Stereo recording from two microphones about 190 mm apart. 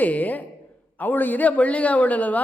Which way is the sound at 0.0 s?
10° left (ahead or behind).